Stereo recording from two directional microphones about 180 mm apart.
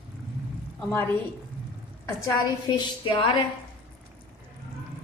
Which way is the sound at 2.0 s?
20° left (ahead or behind).